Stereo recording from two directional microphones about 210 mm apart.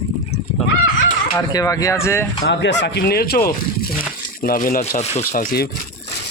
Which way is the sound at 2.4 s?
55° left (ahead or behind).